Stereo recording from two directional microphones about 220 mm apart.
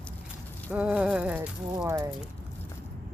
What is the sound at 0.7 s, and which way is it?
Speech, 5° right (ahead or behind).